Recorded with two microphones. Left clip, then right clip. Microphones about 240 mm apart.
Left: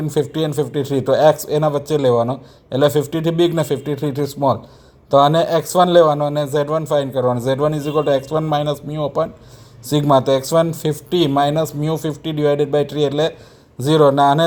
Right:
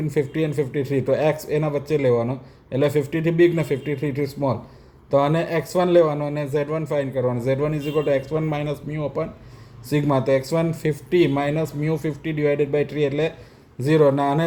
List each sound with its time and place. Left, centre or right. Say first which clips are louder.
0.1 s a man's voice: left 4 dB; centre